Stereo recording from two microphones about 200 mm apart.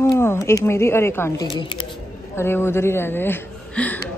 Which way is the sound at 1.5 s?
25° left (ahead or behind).